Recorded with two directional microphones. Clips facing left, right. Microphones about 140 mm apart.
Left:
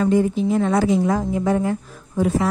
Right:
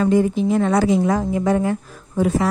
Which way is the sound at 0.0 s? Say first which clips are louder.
Right 1 dB; 80° right.